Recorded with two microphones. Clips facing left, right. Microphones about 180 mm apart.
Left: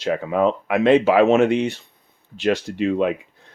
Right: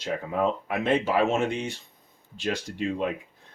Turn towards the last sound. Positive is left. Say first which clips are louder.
# left 8 dB
turn(degrees=80)